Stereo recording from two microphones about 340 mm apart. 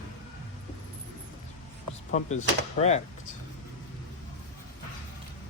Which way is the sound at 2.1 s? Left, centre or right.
Centre.